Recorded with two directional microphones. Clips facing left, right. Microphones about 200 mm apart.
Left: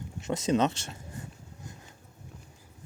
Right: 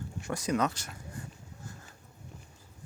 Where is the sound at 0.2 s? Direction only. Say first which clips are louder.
Left 4 dB; 20° left (ahead or behind).